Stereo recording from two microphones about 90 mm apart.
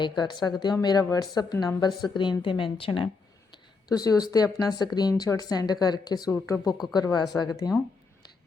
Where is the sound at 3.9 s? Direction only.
45° left (ahead or behind).